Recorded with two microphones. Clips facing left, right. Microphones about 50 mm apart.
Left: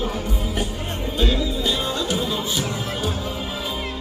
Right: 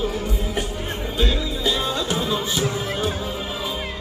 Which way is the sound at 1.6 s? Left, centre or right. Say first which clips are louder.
Right 1 dB; centre.